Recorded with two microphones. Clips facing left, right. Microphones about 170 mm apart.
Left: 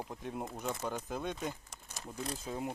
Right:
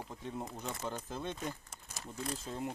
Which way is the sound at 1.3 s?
15° left (ahead or behind).